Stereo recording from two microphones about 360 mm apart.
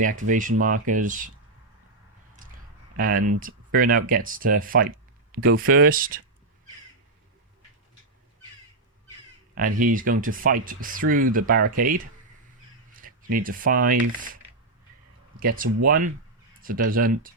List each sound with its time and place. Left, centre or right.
0.0 s speech: right
3.0 s speech: right
9.6 s speech: right
15.4 s speech: right